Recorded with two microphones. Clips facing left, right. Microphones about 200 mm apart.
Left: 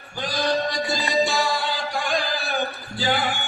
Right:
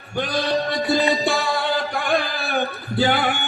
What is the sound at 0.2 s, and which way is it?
Music, 60° right (ahead or behind).